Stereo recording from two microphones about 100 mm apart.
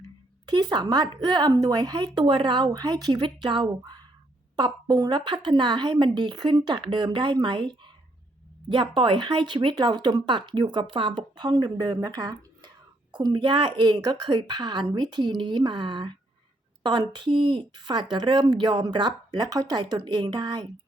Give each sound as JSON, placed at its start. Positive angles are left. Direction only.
{"t": 0.4, "sound": "speech", "side_deg": -50}
{"t": 4.5, "sound": "speech", "side_deg": -45}
{"t": 9.0, "sound": "speech", "side_deg": -50}